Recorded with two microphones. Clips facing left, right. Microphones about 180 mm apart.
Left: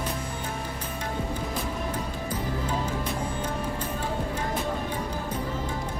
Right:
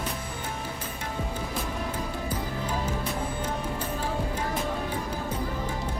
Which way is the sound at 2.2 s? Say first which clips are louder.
Left 1 dB; 10° right (ahead or behind).